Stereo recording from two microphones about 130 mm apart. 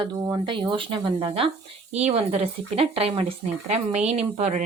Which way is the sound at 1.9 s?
55° right (ahead or behind).